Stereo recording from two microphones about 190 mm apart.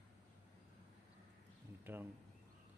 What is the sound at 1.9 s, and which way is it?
Speech, 10° right (ahead or behind).